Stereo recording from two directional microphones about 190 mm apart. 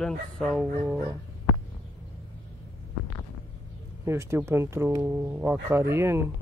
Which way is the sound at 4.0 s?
15° right (ahead or behind).